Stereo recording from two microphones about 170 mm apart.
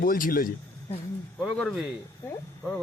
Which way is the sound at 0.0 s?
55° left (ahead or behind).